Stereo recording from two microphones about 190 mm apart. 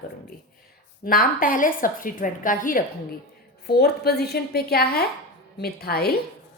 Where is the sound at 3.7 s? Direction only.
55° left (ahead or behind).